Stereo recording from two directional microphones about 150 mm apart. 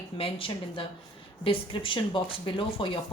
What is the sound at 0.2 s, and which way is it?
Speech, 35° left (ahead or behind).